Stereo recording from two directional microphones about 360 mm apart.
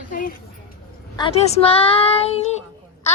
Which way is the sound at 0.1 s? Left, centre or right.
Left.